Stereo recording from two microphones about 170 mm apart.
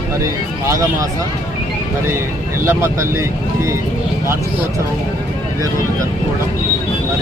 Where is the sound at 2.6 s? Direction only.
15° right (ahead or behind).